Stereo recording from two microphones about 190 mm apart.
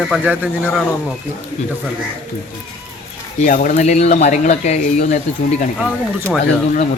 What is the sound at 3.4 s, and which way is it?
Speech, 45° left (ahead or behind).